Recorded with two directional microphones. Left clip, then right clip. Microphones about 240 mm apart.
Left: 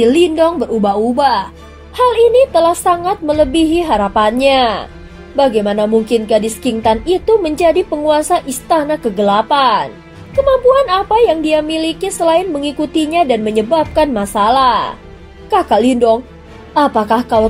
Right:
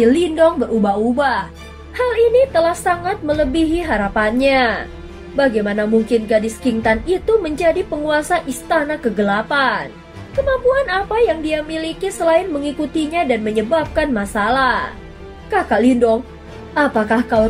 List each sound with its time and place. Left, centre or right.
0.1 s a woman's voice: left
2.0 s a woman's voice: left
10.7 s a woman's voice: left